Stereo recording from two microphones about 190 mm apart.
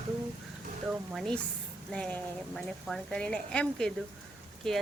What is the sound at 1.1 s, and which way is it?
A woman's voice, centre (ahead or behind).